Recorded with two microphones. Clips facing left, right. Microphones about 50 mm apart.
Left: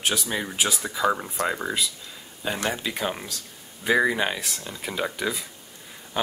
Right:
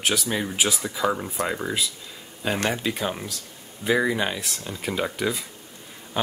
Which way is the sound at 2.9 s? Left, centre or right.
Centre.